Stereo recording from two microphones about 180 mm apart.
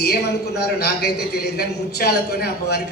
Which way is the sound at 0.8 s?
65° left (ahead or behind).